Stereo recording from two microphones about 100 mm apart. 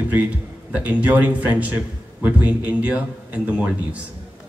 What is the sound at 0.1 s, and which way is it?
Speech, 15° right (ahead or behind).